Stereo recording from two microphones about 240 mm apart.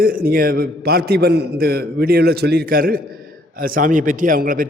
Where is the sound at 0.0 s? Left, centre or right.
Right.